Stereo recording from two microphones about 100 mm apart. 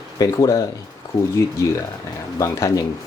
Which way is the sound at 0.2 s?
40° left (ahead or behind).